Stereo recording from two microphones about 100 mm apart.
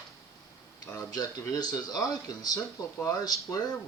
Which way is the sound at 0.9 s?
40° left (ahead or behind).